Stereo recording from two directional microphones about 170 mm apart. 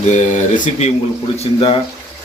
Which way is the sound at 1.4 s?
30° left (ahead or behind).